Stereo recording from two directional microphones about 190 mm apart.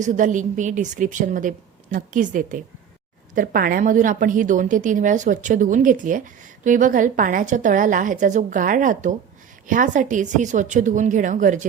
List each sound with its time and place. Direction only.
0.0 s a woman's voice: 40° right (ahead or behind)